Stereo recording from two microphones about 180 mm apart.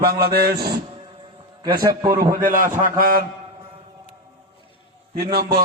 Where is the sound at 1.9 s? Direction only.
20° right (ahead or behind).